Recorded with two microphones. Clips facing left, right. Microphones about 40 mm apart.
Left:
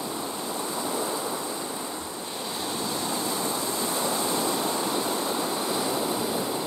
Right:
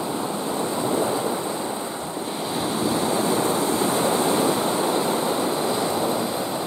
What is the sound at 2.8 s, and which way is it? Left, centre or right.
Waves, right.